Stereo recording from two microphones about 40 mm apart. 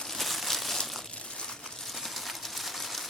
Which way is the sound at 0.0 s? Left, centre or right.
Centre.